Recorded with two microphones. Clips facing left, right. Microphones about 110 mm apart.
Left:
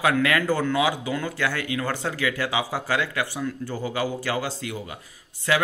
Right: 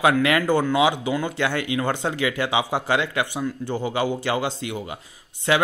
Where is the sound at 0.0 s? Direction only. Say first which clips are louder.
Right 3 dB; 20° right (ahead or behind).